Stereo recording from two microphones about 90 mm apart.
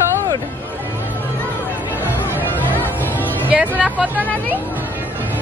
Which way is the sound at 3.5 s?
15° right (ahead or behind).